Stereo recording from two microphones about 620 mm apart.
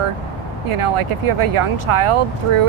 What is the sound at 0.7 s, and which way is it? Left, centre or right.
Speech, right.